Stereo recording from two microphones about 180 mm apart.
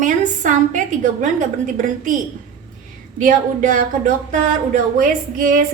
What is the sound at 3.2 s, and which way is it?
A woman's voice, 50° right (ahead or behind).